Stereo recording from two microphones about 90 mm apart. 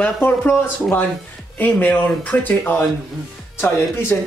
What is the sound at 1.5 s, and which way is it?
Speech, 20° left (ahead or behind).